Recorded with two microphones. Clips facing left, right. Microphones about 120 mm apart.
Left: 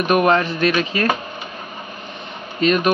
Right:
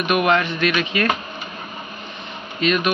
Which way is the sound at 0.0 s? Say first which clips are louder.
Left 3 dB; 35° left (ahead or behind).